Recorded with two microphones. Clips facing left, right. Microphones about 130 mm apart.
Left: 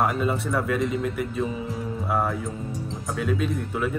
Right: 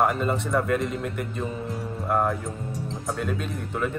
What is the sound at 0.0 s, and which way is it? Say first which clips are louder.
Speech: even; centre (ahead or behind).